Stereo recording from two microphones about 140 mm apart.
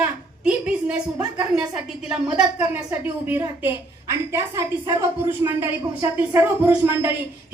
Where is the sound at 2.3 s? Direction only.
5° right (ahead or behind).